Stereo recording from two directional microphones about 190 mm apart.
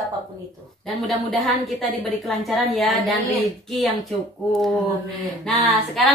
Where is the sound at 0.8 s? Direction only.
Centre (ahead or behind).